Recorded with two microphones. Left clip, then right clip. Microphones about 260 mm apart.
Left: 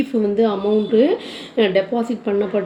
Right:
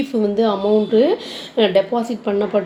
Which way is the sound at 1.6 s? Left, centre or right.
Right.